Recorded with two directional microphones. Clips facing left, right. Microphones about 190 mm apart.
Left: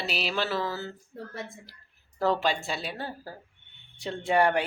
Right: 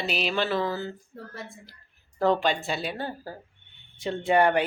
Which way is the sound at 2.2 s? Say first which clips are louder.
Right 3 dB; 5° left (ahead or behind).